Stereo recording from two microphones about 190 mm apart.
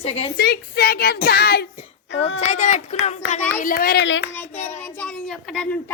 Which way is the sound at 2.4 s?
40° left (ahead or behind).